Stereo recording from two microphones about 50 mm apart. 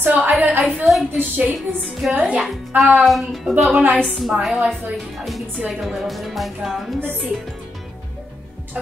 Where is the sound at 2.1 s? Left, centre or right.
Right.